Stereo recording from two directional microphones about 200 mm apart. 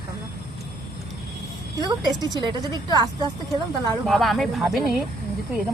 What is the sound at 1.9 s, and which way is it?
Speech, 20° right (ahead or behind).